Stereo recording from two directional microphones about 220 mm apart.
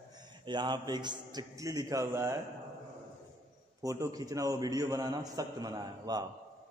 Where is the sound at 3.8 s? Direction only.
15° right (ahead or behind).